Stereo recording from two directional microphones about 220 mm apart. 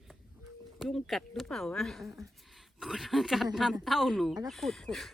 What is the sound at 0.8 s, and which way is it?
Speech, centre (ahead or behind).